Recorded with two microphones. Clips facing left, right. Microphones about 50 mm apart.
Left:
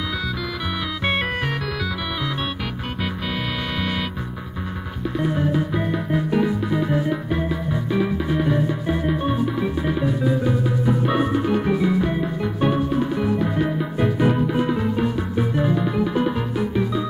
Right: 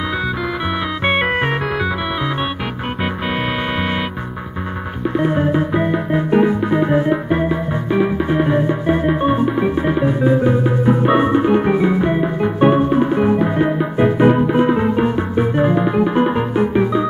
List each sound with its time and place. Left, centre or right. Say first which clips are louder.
1.0 s music: right 7 dB; right
5.1 s music: right 5 dB; right